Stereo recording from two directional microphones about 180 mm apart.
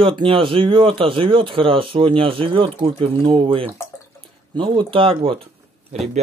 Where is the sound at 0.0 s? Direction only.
30° right (ahead or behind).